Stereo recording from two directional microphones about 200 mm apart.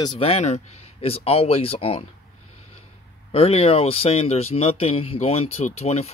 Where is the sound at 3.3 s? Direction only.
30° left (ahead or behind).